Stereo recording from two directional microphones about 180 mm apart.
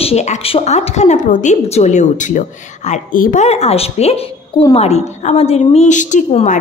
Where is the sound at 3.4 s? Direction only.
35° left (ahead or behind).